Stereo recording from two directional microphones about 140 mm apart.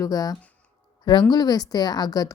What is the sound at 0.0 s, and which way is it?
Speech, 25° left (ahead or behind).